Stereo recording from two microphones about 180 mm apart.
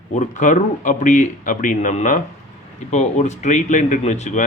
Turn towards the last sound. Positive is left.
turn(degrees=40)  # may be behind; listen again after turning